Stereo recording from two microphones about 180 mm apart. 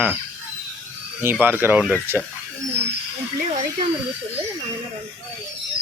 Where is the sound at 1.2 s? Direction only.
10° right (ahead or behind).